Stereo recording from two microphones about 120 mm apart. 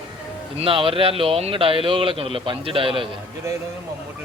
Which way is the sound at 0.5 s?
50° right (ahead or behind).